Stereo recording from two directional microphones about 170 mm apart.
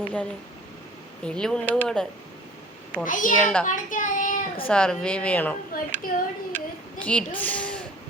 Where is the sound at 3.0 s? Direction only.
50° left (ahead or behind).